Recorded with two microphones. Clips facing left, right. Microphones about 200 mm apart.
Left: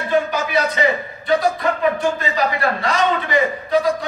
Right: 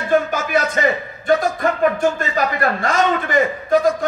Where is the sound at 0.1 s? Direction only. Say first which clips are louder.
Right 2 dB; 45° right (ahead or behind).